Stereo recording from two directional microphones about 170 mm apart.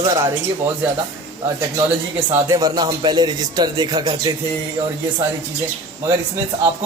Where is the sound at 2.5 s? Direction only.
20° right (ahead or behind).